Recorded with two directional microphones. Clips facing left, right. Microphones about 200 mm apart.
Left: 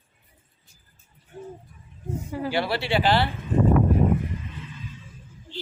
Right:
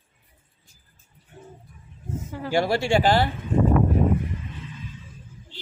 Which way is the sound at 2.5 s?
45° right (ahead or behind).